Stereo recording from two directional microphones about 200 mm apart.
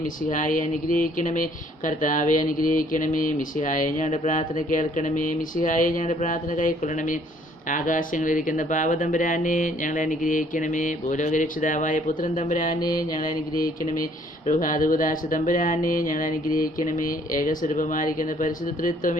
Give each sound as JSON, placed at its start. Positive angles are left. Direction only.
{"t": 0.0, "sound": "speech", "side_deg": 40}
{"t": 12.8, "sound": "mantra", "side_deg": 20}
{"t": 13.1, "sound": "speech", "side_deg": 40}